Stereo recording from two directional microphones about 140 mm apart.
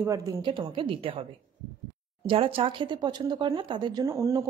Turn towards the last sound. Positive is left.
turn(degrees=-20)  # may be behind; listen again after turning